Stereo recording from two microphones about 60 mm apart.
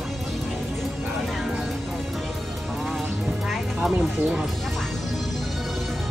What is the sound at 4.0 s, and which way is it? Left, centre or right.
Speech, centre.